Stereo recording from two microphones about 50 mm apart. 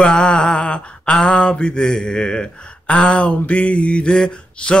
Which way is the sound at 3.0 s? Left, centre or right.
Left.